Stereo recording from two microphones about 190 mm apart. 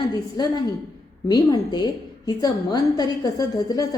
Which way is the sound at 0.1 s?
20° left (ahead or behind).